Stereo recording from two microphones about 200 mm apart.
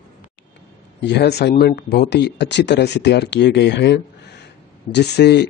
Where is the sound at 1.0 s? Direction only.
55° left (ahead or behind).